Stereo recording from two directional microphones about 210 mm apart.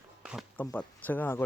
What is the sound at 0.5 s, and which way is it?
Speech, 10° left (ahead or behind).